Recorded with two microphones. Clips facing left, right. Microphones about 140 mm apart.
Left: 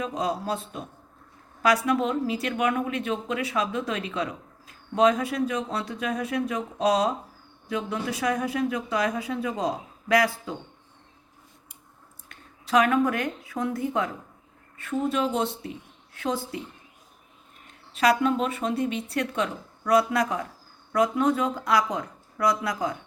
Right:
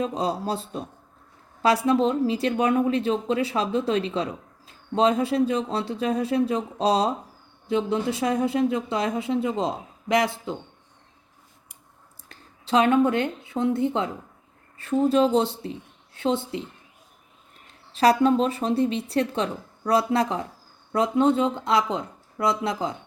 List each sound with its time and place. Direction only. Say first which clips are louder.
0.0 s a woman's voice: right 2 dB; 30° right (ahead or behind)
12.3 s a woman's voice: even; 30° right (ahead or behind)
17.9 s a woman's voice: right 4 dB; 30° right (ahead or behind)